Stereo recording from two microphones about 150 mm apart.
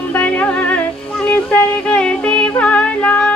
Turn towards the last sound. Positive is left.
turn(degrees=10)  # may be behind; listen again after turning